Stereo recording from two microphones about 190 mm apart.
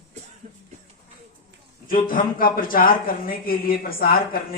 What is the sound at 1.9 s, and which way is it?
Speech, 45° left (ahead or behind).